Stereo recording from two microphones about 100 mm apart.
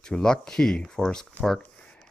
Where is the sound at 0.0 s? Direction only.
5° left (ahead or behind).